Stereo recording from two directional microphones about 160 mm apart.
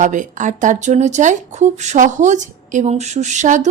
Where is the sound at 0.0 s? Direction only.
50° right (ahead or behind).